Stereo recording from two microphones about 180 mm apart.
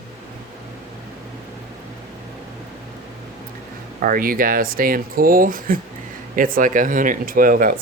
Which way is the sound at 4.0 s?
50° right (ahead or behind).